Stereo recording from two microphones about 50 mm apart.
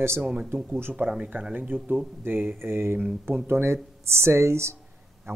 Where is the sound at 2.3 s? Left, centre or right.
Right.